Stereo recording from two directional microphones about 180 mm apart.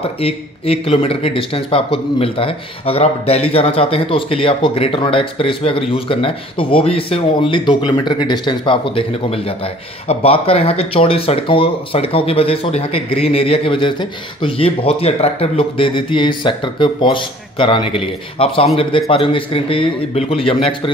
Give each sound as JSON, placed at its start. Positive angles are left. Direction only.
{"t": 0.2, "sound": "speech", "side_deg": 30}